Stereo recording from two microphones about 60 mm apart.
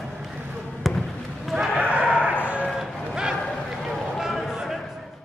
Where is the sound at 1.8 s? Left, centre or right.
Right.